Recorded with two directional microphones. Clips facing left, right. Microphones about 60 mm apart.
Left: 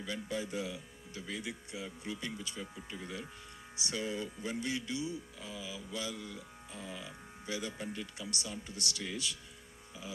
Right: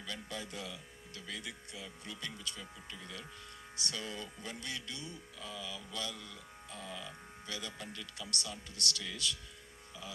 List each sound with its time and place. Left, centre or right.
0.0 s speech: centre